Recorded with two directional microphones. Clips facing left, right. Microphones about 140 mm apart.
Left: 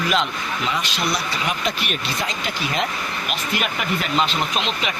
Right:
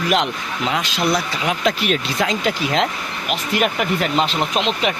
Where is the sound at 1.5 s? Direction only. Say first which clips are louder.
Right 9 dB; 90° right.